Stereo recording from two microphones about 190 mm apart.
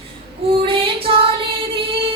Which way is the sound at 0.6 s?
30° right (ahead or behind).